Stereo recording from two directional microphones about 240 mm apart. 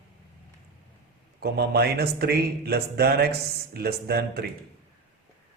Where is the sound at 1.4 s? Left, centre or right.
Right.